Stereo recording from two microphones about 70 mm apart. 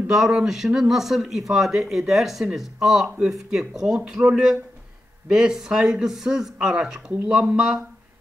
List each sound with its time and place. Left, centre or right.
0.1 s speech: centre